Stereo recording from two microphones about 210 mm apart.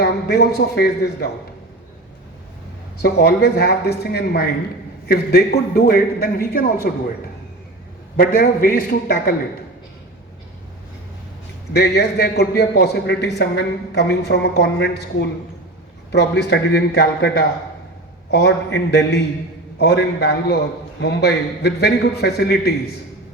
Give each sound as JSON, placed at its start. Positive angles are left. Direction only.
{"t": 0.0, "sound": "a man's voice", "side_deg": 50}
{"t": 3.0, "sound": "a man's voice", "side_deg": 50}
{"t": 8.1, "sound": "a man's voice", "side_deg": 45}
{"t": 11.7, "sound": "a man's voice", "side_deg": 50}
{"t": 16.1, "sound": "a man's voice", "side_deg": 55}